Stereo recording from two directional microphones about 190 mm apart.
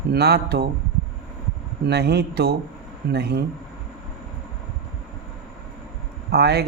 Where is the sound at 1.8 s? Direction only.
60° right (ahead or behind).